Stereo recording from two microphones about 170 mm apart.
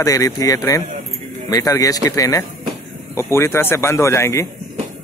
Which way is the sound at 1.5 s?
20° left (ahead or behind).